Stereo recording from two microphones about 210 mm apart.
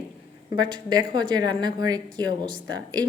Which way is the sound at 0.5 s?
20° right (ahead or behind).